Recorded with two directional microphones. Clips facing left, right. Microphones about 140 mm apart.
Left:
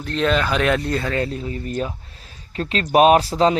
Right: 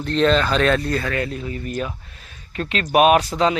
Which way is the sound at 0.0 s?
5° left (ahead or behind).